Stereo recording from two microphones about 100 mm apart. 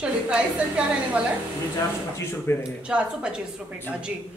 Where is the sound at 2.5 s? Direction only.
25° left (ahead or behind).